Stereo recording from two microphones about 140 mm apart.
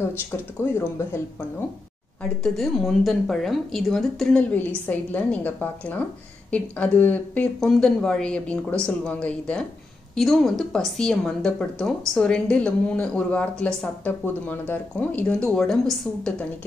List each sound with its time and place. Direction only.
0.3 s speech: 20° left (ahead or behind)
2.2 s speech: 5° left (ahead or behind)